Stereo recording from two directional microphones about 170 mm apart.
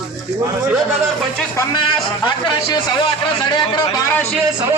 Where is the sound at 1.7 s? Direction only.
30° left (ahead or behind).